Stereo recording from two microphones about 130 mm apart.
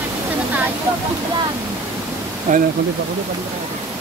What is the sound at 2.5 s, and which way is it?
Speech, 70° right (ahead or behind).